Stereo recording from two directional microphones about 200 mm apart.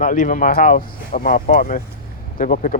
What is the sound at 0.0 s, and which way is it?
Speech, 40° left (ahead or behind).